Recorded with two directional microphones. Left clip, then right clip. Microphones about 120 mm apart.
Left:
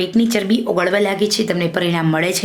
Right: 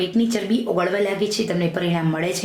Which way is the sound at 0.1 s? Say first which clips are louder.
Left 5 dB; 40° left (ahead or behind).